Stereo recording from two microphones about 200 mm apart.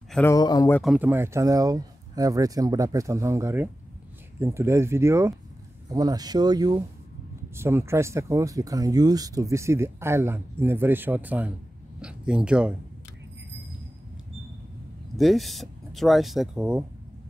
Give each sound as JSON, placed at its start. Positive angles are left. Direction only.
{"t": 0.1, "sound": "speech", "side_deg": 15}
{"t": 0.8, "sound": "speech", "side_deg": -10}
{"t": 15.1, "sound": "speech", "side_deg": 0}